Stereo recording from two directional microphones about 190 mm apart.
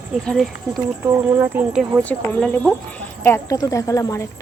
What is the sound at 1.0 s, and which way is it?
Speech, 10° right (ahead or behind).